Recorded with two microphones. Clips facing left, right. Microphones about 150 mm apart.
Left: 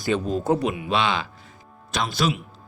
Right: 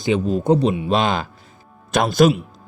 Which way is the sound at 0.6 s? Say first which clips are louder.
Right 6 dB; 30° right (ahead or behind).